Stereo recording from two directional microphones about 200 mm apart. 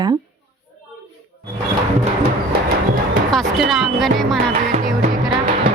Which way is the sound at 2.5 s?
45° right (ahead or behind).